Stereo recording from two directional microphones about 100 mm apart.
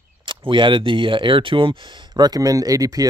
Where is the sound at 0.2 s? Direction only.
55° right (ahead or behind).